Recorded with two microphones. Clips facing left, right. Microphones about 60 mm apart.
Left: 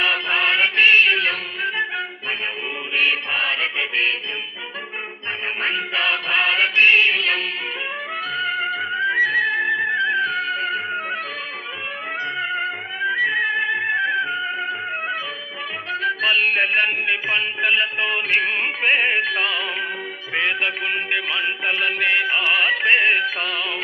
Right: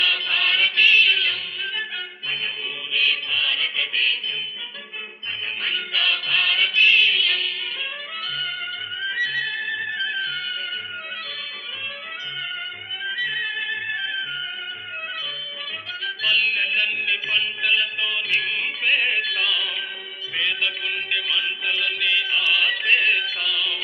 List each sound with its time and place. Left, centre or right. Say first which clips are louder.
0.0 s music: left 3 dB; left
2.9 s chant: left 3 dB; left
5.6 s chant: left 3 dB; left
8.4 s music: left 9 dB; left
12.4 s music: left 7 dB; left